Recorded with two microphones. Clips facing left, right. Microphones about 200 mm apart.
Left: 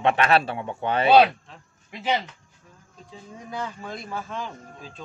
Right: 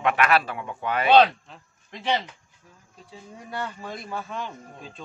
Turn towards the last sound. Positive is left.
turn(degrees=0)  # may be behind; listen again after turning